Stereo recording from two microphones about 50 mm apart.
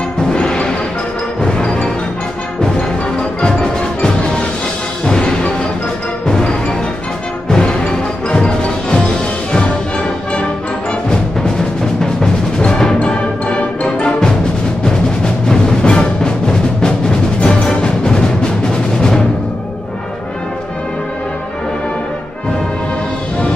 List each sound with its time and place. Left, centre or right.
0.3 s music: centre
3.3 s music: centre
12.0 s music: centre
18.9 s timpani: centre